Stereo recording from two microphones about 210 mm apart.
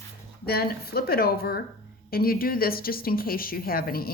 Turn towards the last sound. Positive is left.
turn(degrees=45)  # may be behind; listen again after turning